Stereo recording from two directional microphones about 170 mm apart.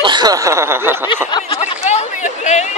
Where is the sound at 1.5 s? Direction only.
40° left (ahead or behind).